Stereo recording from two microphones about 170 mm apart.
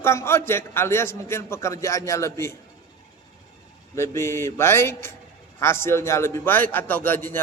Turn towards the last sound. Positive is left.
turn(degrees=10)  # may be behind; listen again after turning